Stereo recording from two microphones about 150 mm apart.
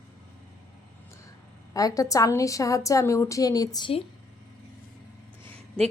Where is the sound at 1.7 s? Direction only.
25° left (ahead or behind).